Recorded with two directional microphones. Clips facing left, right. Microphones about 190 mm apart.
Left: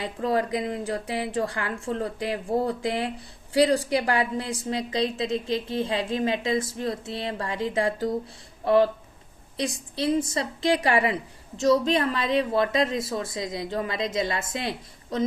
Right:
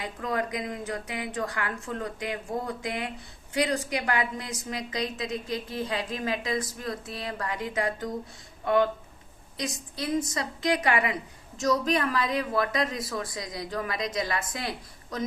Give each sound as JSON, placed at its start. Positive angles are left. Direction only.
{"t": 0.0, "sound": "a woman's voice", "side_deg": 30}